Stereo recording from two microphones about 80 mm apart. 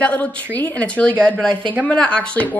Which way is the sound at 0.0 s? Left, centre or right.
Centre.